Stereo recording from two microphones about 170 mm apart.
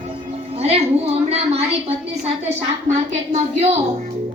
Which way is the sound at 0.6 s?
35° right (ahead or behind).